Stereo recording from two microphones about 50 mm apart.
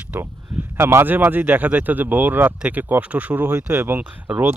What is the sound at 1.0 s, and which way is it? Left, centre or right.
Speech, right.